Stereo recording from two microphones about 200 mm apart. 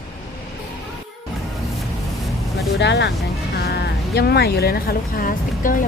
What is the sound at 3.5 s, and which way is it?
Speech, 55° left (ahead or behind).